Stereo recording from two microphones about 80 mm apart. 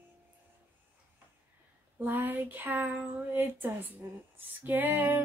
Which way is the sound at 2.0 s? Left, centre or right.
Right.